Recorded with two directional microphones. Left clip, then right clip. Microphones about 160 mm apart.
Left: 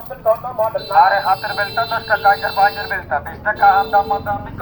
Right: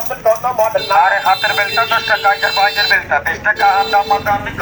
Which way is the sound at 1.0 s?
25° right (ahead or behind).